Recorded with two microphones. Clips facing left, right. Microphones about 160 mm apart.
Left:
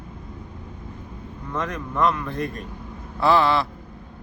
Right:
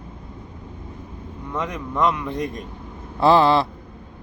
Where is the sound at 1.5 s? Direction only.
10° right (ahead or behind).